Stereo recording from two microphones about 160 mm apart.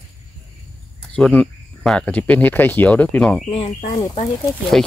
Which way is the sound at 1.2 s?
5° left (ahead or behind).